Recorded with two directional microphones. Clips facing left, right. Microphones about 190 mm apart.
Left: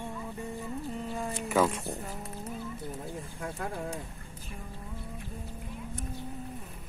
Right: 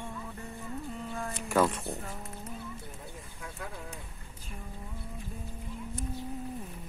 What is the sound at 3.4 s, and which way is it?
Speech, 40° left (ahead or behind).